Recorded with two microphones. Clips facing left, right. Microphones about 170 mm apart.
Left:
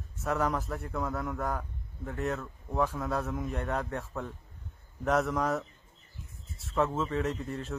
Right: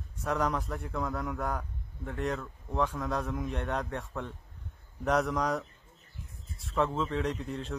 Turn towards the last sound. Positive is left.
turn(degrees=0)  # may be behind; listen again after turning